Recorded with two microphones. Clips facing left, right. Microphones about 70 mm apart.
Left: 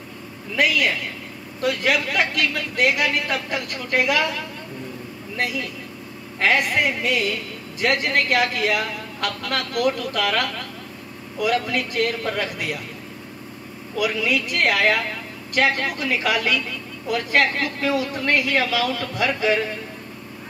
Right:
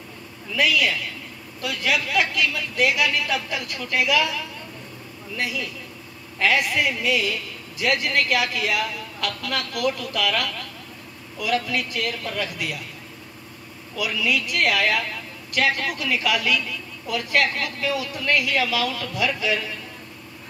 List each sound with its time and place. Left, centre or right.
0.6 s a woman's voice: left
6.4 s a woman's voice: left
13.9 s a woman's voice: left